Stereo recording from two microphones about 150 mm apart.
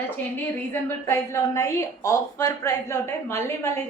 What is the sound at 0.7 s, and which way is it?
A woman's voice, 15° left (ahead or behind).